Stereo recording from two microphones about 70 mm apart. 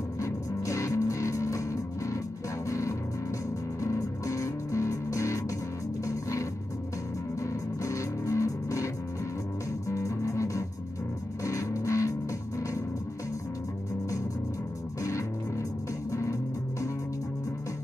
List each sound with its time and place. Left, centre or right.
0.2 s music: left
15.0 s music: left